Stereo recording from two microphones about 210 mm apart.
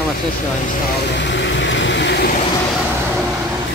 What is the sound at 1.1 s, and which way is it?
Vehicle, 60° left (ahead or behind).